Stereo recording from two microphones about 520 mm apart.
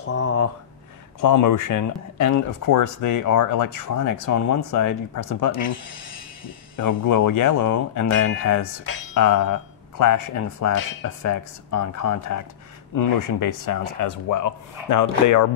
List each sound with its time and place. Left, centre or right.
0.0 s speech: left
1.2 s speech: left
6.8 s speech: left
13.7 s speech: left